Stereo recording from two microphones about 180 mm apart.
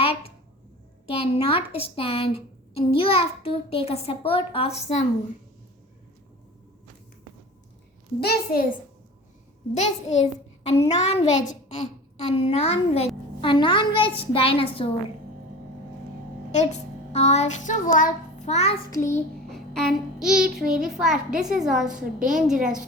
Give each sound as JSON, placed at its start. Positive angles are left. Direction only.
{"t": 0.0, "sound": "a sound", "side_deg": 35}
{"t": 1.1, "sound": "a woman's voice", "side_deg": 30}
{"t": 8.2, "sound": "a child's voice", "side_deg": 60}
{"t": 9.7, "sound": "a woman's voice", "side_deg": 40}
{"t": 16.5, "sound": "a child's voice", "side_deg": 40}
{"t": 18.9, "sound": "child singing", "side_deg": 15}
{"t": 19.5, "sound": "child singing", "side_deg": 0}
{"t": 20.7, "sound": "a child's voice", "side_deg": -5}